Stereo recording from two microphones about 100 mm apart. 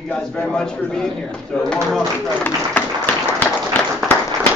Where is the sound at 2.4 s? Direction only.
20° left (ahead or behind).